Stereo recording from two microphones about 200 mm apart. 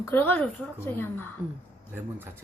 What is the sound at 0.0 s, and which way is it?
A woman's voice, 10° left (ahead or behind).